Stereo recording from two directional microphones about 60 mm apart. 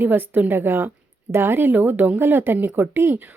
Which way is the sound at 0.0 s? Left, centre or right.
Right.